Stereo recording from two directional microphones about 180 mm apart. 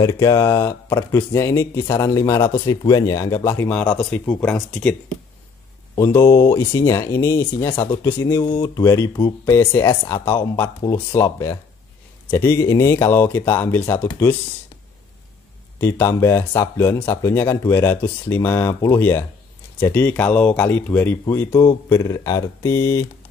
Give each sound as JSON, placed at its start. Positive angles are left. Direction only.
{"t": 0.0, "sound": "speech", "side_deg": 20}
{"t": 5.9, "sound": "speech", "side_deg": 15}
{"t": 15.8, "sound": "speech", "side_deg": 15}